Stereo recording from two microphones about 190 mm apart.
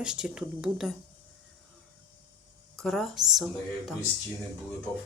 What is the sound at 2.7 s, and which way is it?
Speech, centre (ahead or behind).